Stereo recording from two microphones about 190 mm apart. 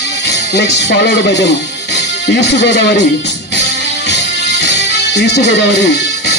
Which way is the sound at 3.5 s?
65° left (ahead or behind).